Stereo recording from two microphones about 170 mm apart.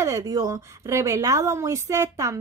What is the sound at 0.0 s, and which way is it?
A woman's voice, 20° right (ahead or behind).